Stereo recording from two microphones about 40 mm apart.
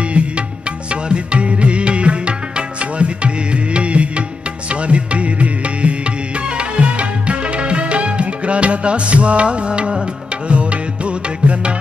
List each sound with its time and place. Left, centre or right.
0.2 s music: right